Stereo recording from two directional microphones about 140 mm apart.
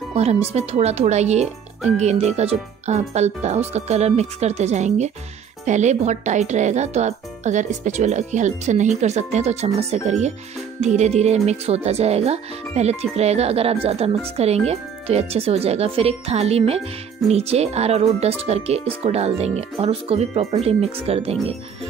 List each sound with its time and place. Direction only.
0.1 s speech: 45° right (ahead or behind)